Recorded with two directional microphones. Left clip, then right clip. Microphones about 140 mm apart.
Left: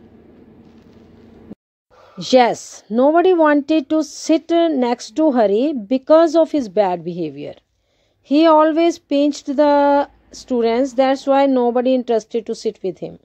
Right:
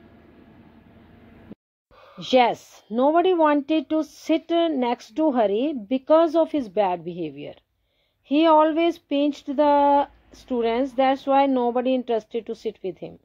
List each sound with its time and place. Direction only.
2.1 s speech: 25° left (ahead or behind)